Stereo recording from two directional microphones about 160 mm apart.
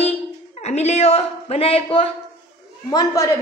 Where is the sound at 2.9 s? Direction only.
20° left (ahead or behind).